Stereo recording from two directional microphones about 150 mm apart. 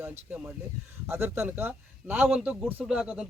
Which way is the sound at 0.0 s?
10° right (ahead or behind).